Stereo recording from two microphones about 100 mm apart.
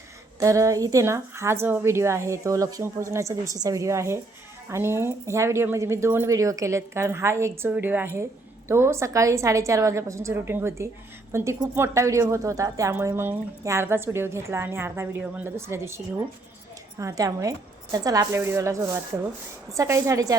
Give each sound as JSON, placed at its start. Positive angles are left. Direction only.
{"t": 0.3, "sound": "a woman's voice", "side_deg": -30}